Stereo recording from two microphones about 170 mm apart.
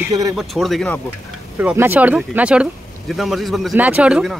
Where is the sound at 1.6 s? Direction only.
10° right (ahead or behind).